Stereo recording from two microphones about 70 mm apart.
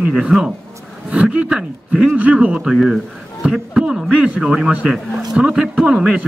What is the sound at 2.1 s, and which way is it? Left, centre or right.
Speech, centre.